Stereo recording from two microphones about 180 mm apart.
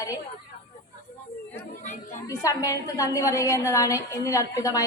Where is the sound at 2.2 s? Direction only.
20° left (ahead or behind).